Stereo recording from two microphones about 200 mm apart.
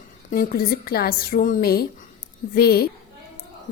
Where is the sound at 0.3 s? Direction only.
45° left (ahead or behind).